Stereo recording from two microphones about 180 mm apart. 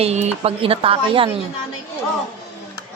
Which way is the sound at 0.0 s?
35° right (ahead or behind).